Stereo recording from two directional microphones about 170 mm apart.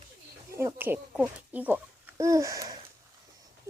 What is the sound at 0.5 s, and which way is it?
A child's voice, 15° right (ahead or behind).